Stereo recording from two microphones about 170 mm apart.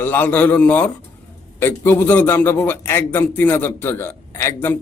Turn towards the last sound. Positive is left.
turn(degrees=15)  # may be behind; listen again after turning